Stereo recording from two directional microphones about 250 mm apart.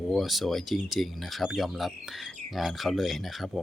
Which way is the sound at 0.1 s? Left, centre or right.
Centre.